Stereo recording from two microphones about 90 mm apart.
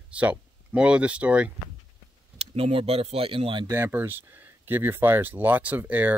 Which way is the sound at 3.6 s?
25° right (ahead or behind).